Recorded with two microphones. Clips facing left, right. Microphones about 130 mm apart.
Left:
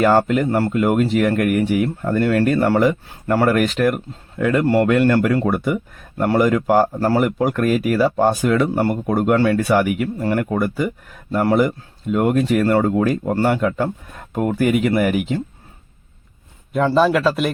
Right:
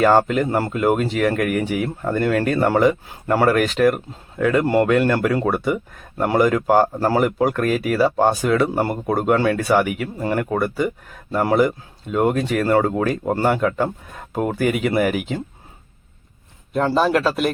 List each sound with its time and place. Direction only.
0.0 s speech: centre (ahead or behind)
0.4 s speech: 15° right (ahead or behind)
0.7 s speech: centre (ahead or behind)
7.2 s speech: centre (ahead or behind)
16.9 s speech: centre (ahead or behind)